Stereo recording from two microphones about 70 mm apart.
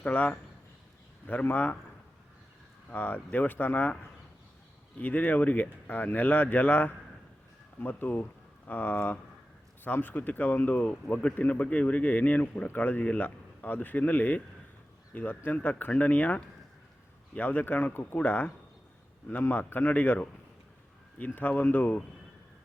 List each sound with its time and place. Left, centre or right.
0.0 s speech: left
2.9 s speech: left
4.9 s speech: left